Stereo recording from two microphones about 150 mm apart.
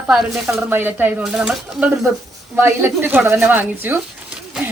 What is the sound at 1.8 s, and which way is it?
Speech, 20° right (ahead or behind).